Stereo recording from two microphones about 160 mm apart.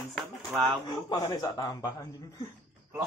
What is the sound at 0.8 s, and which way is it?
Speech, 25° left (ahead or behind).